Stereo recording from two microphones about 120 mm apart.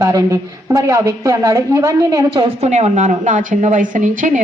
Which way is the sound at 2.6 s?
70° right (ahead or behind).